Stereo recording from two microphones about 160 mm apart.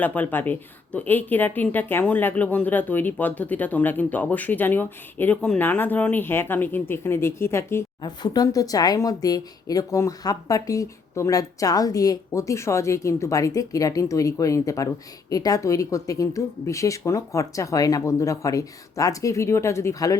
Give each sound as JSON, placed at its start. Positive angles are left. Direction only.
{"t": 0.0, "sound": "speech", "side_deg": 10}
{"t": 8.0, "sound": "speech", "side_deg": 25}